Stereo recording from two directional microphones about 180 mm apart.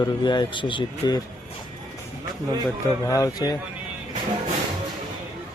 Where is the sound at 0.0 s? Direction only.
25° left (ahead or behind).